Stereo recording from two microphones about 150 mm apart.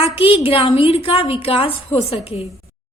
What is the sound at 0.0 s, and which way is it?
A woman's voice, 40° left (ahead or behind).